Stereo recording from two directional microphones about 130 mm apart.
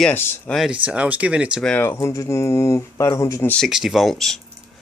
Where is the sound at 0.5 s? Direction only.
5° right (ahead or behind).